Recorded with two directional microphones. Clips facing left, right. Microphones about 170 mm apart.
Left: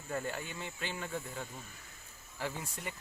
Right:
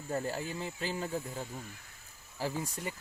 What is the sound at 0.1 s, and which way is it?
Speech, 30° right (ahead or behind).